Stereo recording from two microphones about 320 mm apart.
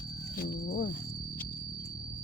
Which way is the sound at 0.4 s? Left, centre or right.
Left.